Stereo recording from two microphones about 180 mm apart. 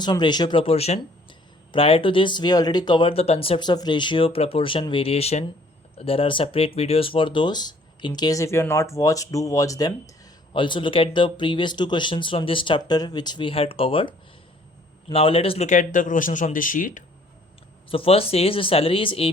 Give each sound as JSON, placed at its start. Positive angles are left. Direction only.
{"t": 0.0, "sound": "speech", "side_deg": 25}
{"t": 15.1, "sound": "speech", "side_deg": 30}
{"t": 17.8, "sound": "speech", "side_deg": 30}